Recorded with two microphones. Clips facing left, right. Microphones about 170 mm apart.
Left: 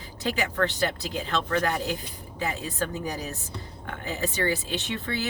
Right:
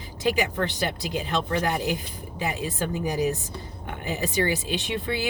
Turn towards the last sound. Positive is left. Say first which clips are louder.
# right 3 dB
turn(degrees=-15)  # may be behind; listen again after turning